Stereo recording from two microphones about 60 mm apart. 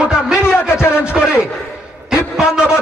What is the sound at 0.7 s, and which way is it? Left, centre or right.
Speech, left.